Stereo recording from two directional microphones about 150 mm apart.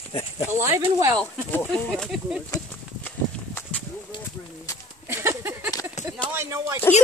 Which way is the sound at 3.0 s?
10° left (ahead or behind).